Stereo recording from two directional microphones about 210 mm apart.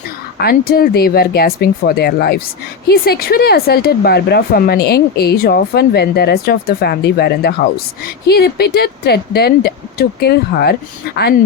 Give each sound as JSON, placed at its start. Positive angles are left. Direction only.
{"t": 0.4, "sound": "speech", "side_deg": 45}